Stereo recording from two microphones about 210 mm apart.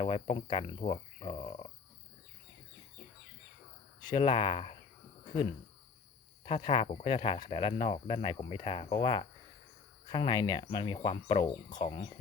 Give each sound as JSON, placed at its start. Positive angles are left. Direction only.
{"t": 0.0, "sound": "speech", "side_deg": 25}
{"t": 4.0, "sound": "speech", "side_deg": 20}
{"t": 6.4, "sound": "speech", "side_deg": 25}